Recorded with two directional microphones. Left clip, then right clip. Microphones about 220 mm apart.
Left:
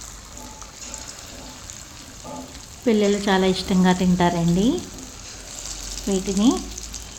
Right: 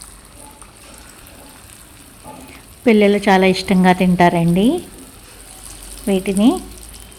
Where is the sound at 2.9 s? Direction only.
25° right (ahead or behind).